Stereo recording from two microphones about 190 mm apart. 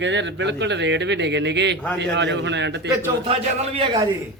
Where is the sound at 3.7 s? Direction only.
25° right (ahead or behind).